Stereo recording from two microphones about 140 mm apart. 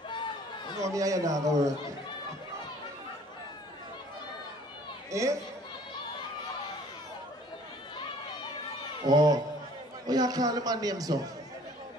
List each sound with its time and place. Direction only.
0.1 s chatter: 35° left (ahead or behind)
0.9 s a man's voice: 25° right (ahead or behind)
5.1 s a man's voice: 20° right (ahead or behind)
9.0 s a man's voice: 25° right (ahead or behind)